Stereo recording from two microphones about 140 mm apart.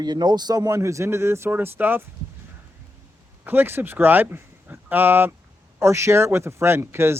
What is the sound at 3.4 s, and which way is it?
Speech, 15° right (ahead or behind).